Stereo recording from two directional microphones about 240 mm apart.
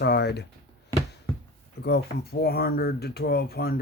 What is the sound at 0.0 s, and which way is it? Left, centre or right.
Speech, left.